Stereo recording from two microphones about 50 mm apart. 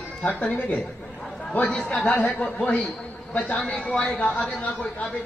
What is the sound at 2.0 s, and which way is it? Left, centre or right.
Speech, left.